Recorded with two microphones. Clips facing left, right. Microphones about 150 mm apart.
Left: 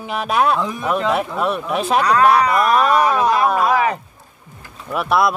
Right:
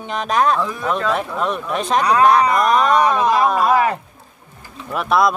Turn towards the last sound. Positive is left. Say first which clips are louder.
# even
turn(degrees=5)  # may be behind; listen again after turning